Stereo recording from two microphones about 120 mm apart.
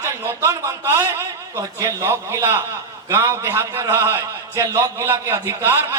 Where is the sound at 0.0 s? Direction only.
20° right (ahead or behind).